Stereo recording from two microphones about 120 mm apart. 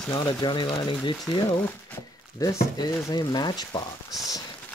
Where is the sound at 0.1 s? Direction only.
35° left (ahead or behind).